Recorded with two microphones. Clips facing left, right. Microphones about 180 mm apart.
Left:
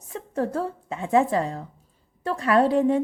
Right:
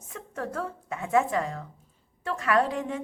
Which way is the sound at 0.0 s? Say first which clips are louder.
Left 8 dB; 30° left (ahead or behind).